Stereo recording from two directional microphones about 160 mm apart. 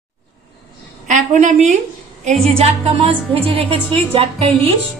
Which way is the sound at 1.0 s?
50° right (ahead or behind).